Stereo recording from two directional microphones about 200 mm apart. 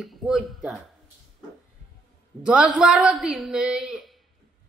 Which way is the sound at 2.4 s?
5° right (ahead or behind).